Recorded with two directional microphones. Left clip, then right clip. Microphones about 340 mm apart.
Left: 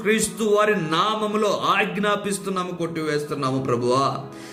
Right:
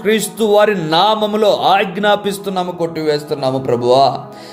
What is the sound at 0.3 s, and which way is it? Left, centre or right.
Speech, centre.